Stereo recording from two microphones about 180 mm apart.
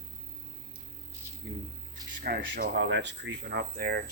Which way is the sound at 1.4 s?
65° right (ahead or behind).